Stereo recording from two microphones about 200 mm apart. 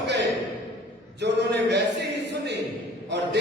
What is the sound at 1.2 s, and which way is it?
Speech, 60° right (ahead or behind).